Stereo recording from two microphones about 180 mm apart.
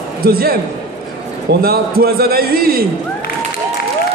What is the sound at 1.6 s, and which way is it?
Speech, 60° right (ahead or behind).